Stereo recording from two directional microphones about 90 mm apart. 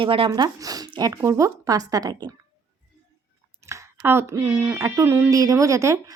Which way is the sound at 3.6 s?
30° right (ahead or behind).